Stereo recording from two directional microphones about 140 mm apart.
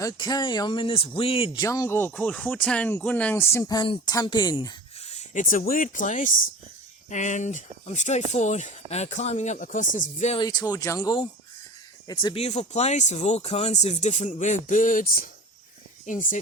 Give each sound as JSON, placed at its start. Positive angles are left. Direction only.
{"t": 0.0, "sound": "speech", "side_deg": 30}
{"t": 1.6, "sound": "speech", "side_deg": 25}
{"t": 4.9, "sound": "speech", "side_deg": 50}
{"t": 10.3, "sound": "speech", "side_deg": 30}
{"t": 12.3, "sound": "speech", "side_deg": 50}